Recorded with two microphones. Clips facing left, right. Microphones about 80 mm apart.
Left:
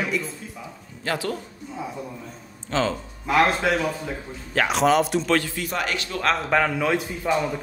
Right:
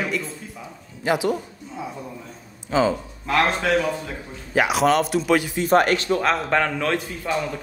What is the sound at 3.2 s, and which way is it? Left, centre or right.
Speech, centre.